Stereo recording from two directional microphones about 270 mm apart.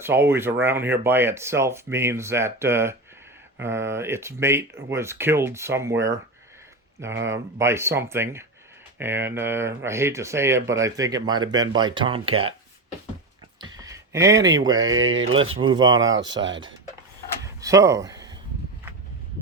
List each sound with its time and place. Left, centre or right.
0.0 s speech: centre
13.6 s a sound: centre
14.9 s speech: right
15.6 s speech: centre
16.1 s speech: right
17.4 s a sound: centre